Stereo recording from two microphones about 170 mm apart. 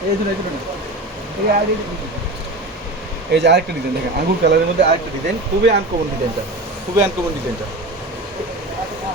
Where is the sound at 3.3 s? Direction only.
85° right.